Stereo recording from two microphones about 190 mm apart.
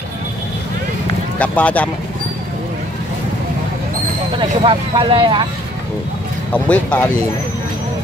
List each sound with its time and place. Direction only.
1.4 s speech: 5° left (ahead or behind)
4.4 s speech: 25° right (ahead or behind)
6.5 s speech: 5° left (ahead or behind)